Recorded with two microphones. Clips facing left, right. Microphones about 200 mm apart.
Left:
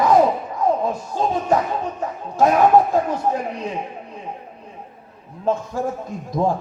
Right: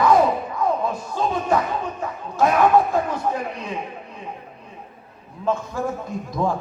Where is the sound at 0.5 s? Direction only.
40° left (ahead or behind).